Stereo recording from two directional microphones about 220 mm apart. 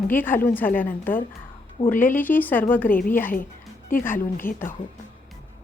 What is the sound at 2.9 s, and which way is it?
A woman's voice, 40° left (ahead or behind).